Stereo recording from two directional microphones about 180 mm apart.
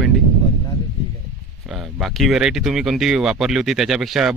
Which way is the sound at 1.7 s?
Centre (ahead or behind).